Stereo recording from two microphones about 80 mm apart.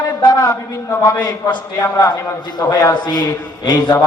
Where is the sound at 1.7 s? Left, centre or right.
Left.